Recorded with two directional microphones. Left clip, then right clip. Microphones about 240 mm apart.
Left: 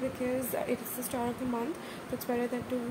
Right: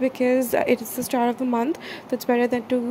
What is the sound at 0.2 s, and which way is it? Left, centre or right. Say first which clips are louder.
A woman's voice: right 14 dB; right.